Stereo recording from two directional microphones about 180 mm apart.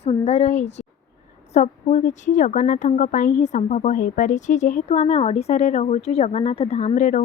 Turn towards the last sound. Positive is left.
turn(degrees=45)  # may be behind; listen again after turning